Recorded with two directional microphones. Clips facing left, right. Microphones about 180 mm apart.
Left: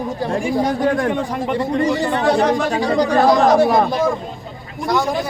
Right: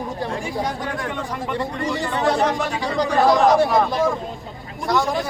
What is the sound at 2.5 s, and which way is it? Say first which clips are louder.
Speech: left 6 dB; 40° left (ahead or behind).